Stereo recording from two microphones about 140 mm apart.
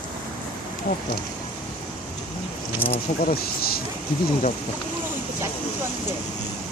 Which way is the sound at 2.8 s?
90° left.